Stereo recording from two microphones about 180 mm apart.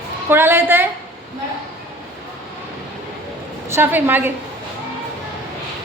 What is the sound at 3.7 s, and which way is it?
Speech, 10° right (ahead or behind).